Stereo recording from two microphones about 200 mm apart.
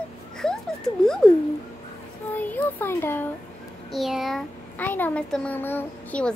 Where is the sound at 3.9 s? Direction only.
Centre (ahead or behind).